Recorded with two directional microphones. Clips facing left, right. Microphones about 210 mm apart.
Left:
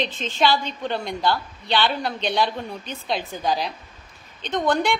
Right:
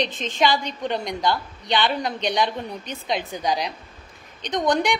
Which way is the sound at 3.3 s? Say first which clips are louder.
Even; 15° right (ahead or behind).